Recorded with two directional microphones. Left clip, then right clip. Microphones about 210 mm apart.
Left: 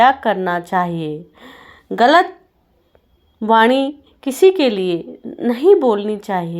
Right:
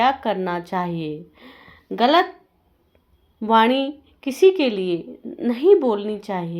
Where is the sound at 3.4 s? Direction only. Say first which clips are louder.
Left 4 dB; 20° left (ahead or behind).